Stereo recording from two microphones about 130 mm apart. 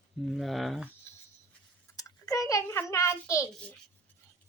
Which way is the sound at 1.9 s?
25° left (ahead or behind).